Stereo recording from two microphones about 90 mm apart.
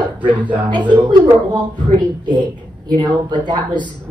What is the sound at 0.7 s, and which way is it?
Speech, 60° right (ahead or behind).